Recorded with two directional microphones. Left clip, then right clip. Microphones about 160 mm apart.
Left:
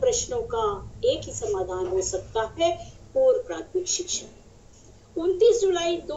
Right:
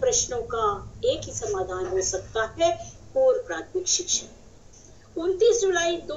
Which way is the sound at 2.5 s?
40° left (ahead or behind).